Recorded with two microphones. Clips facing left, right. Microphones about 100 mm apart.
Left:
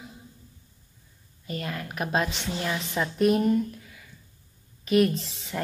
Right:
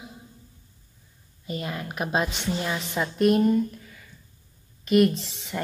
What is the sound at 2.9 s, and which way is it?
A woman's voice, centre (ahead or behind).